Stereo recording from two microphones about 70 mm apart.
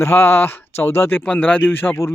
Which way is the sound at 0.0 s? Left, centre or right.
Left.